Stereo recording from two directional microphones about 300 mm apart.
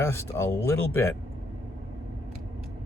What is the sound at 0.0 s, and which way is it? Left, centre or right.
Speech, centre.